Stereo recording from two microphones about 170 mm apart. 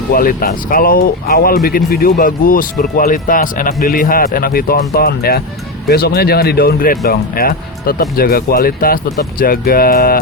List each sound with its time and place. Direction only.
0.1 s speech: 55° left (ahead or behind)